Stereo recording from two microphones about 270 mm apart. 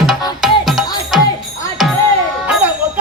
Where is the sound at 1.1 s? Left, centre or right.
Centre.